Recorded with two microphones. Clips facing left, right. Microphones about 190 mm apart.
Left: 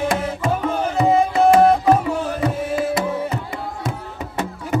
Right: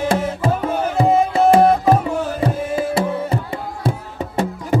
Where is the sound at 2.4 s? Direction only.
30° right (ahead or behind).